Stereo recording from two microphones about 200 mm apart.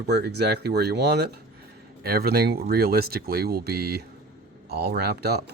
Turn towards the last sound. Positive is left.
turn(degrees=-55)  # may be behind; listen again after turning